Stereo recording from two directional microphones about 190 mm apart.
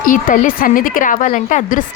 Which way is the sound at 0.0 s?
45° left (ahead or behind).